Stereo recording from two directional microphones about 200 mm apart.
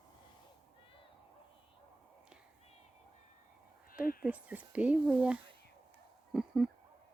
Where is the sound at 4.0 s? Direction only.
45° left (ahead or behind).